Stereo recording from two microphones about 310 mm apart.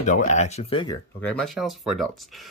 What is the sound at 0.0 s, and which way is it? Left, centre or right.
Speech, left.